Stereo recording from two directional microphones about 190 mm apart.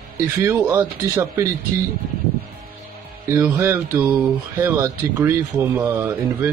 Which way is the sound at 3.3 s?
15° right (ahead or behind).